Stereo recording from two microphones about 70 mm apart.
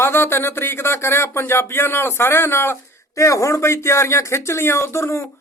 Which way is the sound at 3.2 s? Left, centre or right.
Left.